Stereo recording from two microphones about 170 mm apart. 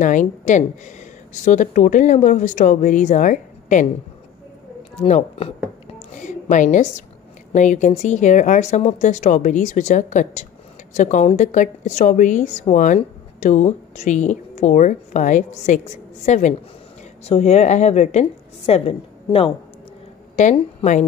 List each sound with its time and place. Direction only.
0.0 s a woman's voice: 45° left (ahead or behind)
4.9 s speech: 40° left (ahead or behind)
5.9 s a sound: 45° left (ahead or behind)
7.5 s a woman's voice: 45° left (ahead or behind)
20.3 s a woman's voice: 45° left (ahead or behind)